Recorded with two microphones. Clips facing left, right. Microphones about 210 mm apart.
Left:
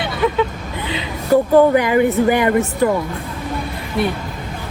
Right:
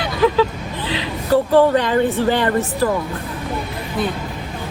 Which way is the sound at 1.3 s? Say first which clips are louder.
Left 2 dB; 15° left (ahead or behind).